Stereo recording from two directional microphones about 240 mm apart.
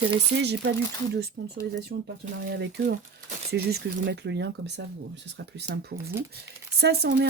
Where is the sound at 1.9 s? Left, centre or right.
Right.